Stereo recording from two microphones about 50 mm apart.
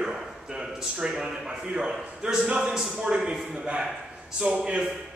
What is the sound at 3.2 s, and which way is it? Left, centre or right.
Speech, centre.